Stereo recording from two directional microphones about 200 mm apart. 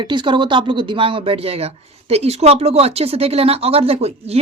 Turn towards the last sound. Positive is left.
turn(degrees=-30)  # may be behind; listen again after turning